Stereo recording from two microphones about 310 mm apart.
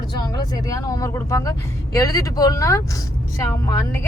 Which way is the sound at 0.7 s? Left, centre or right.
Centre.